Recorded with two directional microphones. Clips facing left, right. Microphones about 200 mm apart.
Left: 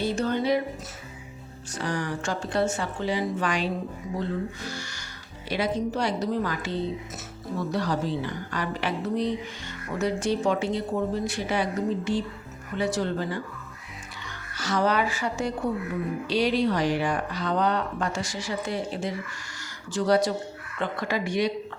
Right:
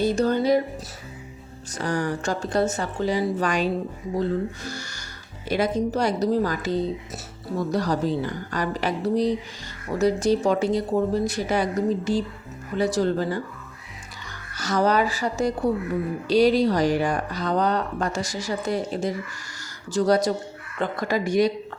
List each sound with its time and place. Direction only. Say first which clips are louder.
0.0 s music: right 5 dB; 40° right (ahead or behind)
1.7 s speech: right 4 dB; 40° right (ahead or behind)
14.5 s speech: right 3 dB; 40° right (ahead or behind)